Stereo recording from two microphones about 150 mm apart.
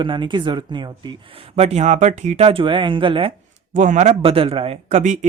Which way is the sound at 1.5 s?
45° right (ahead or behind).